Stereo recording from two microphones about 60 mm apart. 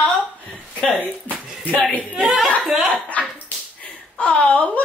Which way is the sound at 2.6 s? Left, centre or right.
Centre.